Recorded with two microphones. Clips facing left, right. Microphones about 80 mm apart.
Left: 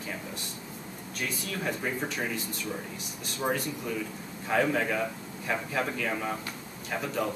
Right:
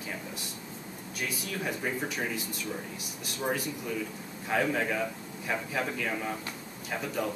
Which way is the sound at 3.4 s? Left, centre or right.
Centre.